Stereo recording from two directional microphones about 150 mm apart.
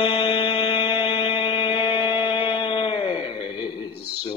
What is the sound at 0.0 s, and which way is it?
Music, 40° left (ahead or behind).